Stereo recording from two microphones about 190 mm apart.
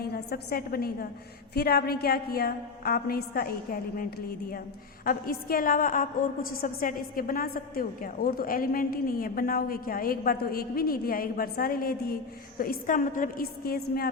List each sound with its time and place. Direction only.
0.0 s a woman's voice: 55° left (ahead or behind)
5.0 s a woman's voice: 50° left (ahead or behind)